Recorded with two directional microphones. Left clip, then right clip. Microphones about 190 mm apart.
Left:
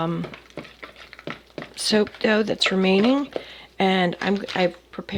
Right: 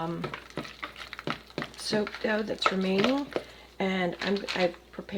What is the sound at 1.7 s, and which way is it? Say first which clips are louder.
Speech: left 10 dB; 50° left (ahead or behind).